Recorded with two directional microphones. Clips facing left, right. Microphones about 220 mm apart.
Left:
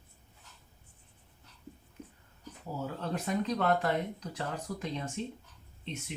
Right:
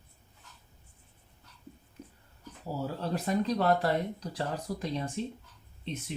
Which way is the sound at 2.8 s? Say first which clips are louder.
Right 2 dB; 35° right (ahead or behind).